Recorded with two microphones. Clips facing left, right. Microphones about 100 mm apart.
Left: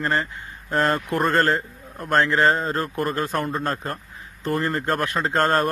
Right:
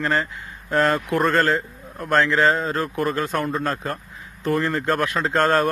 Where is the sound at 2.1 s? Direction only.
35° left (ahead or behind).